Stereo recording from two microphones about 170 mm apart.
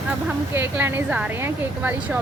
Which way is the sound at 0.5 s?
10° right (ahead or behind).